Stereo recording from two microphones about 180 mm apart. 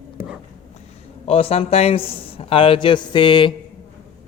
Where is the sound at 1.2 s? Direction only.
35° left (ahead or behind).